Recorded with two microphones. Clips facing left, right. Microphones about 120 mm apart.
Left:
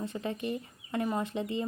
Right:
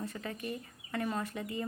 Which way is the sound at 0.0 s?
25° left (ahead or behind).